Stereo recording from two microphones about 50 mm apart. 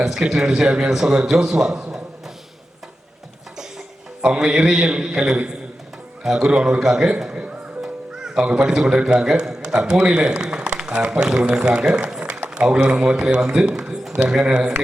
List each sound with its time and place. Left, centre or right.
0.0 s a man's voice: centre
4.2 s a man's voice: centre
6.5 s a man's voice: centre
7.3 s a man's voice: right
12.1 s applause: centre
12.8 s a man's voice: right